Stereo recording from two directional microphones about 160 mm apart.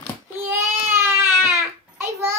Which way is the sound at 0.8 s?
15° right (ahead or behind).